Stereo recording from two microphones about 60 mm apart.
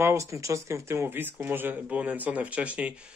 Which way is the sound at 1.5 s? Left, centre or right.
Right.